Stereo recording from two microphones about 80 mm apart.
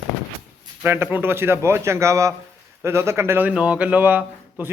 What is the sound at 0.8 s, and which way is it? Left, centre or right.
Speech, right.